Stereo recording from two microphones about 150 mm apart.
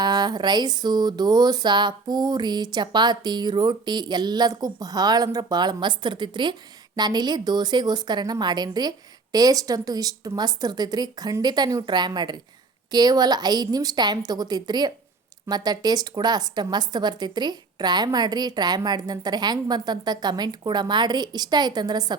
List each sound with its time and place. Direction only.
0.0 s speech: 30° right (ahead or behind)